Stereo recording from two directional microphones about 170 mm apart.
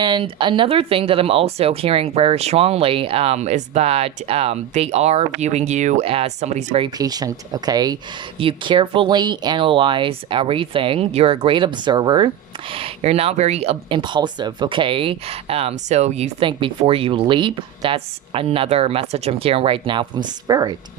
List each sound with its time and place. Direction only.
0.0 s speech: 30° right (ahead or behind)
6.8 s speech: 20° right (ahead or behind)